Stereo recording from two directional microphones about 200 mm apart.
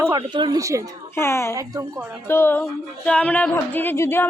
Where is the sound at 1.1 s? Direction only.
15° left (ahead or behind).